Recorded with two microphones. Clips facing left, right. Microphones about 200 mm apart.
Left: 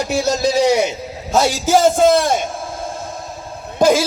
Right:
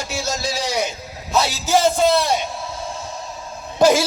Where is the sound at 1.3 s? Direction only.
50° left (ahead or behind).